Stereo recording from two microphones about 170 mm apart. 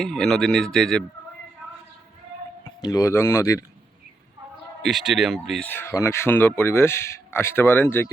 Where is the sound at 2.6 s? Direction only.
25° left (ahead or behind).